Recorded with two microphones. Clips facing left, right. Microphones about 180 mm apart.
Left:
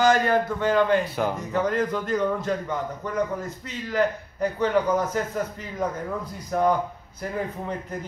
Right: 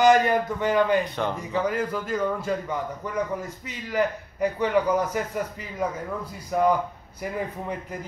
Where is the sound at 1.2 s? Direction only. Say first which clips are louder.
Left 2 dB; 5° left (ahead or behind).